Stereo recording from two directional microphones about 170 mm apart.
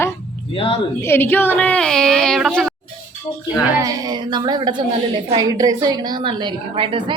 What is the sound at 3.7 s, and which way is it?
A woman's voice, 20° right (ahead or behind).